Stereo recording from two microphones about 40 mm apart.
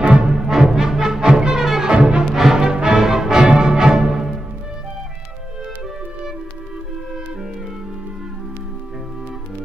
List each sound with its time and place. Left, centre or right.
0.0 s music: right
0.3 s music: centre
1.9 s music: right
2.3 s music: centre
2.6 s music: right